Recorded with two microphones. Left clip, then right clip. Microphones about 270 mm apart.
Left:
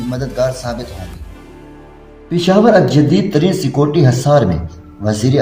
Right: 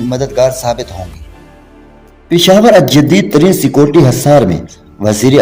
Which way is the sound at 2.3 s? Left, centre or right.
Right.